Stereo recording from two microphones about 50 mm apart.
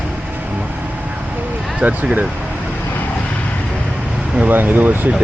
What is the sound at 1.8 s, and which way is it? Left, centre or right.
Speech, right.